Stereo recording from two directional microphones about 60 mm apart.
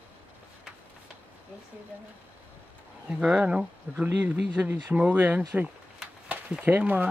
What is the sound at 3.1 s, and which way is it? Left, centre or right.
Speech, centre.